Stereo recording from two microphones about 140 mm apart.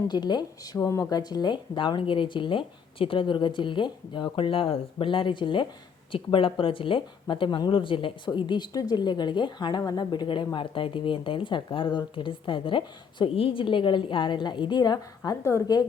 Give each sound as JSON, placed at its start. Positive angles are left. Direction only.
{"t": 0.1, "sound": "speech", "side_deg": 30}